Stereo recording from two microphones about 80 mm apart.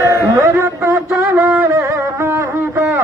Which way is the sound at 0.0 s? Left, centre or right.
Right.